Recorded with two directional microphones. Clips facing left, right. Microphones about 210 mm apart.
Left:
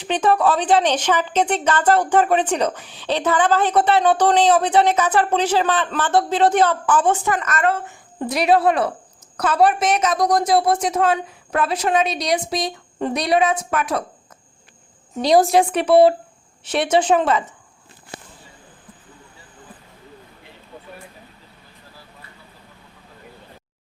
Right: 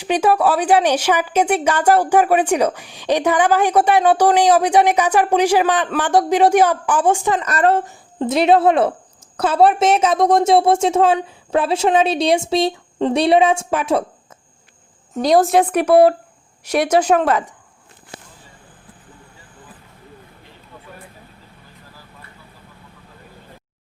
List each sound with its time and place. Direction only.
0.0 s a woman's voice: 10° right (ahead or behind)
7.4 s speech: 35° right (ahead or behind)
8.2 s a woman's voice: 25° right (ahead or behind)
15.3 s a woman's voice: centre (ahead or behind)